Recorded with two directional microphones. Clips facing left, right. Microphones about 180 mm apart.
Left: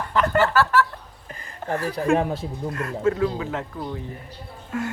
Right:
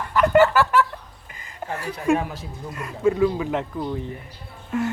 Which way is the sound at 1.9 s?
30° left (ahead or behind).